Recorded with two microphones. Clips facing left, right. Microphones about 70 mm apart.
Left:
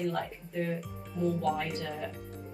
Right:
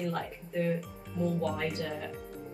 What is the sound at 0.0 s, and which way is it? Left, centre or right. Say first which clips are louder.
Speech: left 2 dB; centre.